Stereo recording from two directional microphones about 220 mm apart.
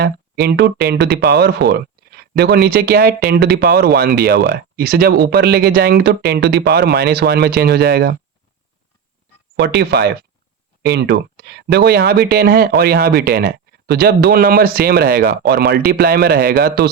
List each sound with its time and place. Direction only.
0.0 s speech: 50° right (ahead or behind)
9.6 s speech: 45° right (ahead or behind)